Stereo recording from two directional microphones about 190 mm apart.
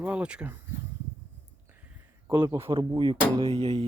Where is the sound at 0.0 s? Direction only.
5° right (ahead or behind).